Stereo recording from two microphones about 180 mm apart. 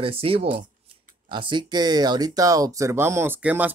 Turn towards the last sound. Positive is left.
turn(degrees=-10)  # may be behind; listen again after turning